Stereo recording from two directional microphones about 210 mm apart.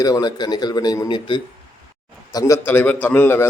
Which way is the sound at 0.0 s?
20° left (ahead or behind).